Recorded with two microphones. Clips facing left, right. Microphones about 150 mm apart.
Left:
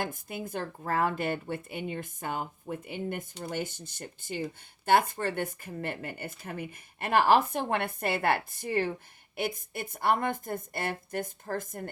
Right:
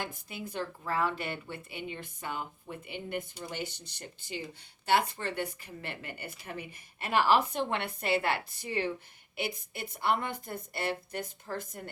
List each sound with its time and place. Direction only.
0.0 s speech: 50° left (ahead or behind)